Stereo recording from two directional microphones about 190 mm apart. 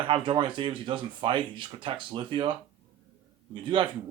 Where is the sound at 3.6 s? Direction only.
25° right (ahead or behind).